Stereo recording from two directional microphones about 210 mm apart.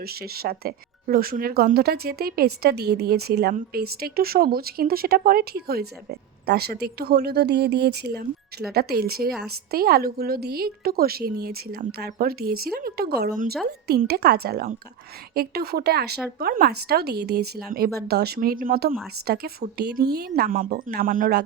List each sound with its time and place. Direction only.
0.0 s speech: 45° right (ahead or behind)